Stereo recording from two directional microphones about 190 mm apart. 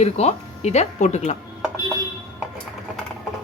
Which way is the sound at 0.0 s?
35° left (ahead or behind).